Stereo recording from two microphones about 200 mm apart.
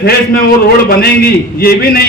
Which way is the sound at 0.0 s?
50° left (ahead or behind).